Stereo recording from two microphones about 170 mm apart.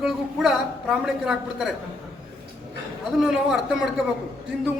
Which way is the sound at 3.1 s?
5° right (ahead or behind).